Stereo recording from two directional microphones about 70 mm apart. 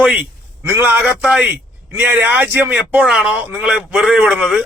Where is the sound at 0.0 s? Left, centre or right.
Right.